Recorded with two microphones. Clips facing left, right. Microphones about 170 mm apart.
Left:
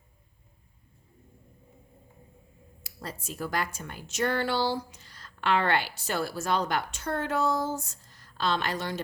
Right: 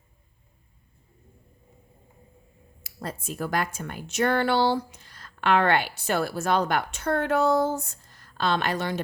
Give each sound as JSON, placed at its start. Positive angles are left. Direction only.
{"t": 2.8, "sound": "speech", "side_deg": -50}